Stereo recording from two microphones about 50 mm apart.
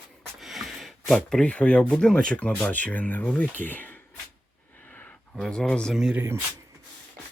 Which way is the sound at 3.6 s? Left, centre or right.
Left.